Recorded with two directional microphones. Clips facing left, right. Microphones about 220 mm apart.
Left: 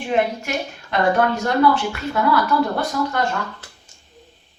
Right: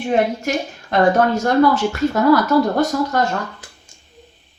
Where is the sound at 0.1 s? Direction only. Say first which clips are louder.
Right 3 dB; 40° right (ahead or behind).